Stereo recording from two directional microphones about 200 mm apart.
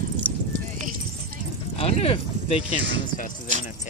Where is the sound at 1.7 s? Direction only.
30° left (ahead or behind).